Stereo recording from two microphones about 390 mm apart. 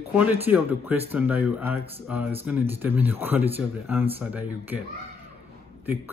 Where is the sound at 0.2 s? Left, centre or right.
Centre.